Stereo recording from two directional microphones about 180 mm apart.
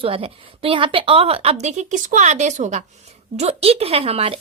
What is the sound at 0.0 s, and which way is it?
Speech, 30° right (ahead or behind).